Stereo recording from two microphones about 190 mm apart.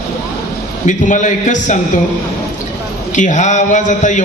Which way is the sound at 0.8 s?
40° left (ahead or behind).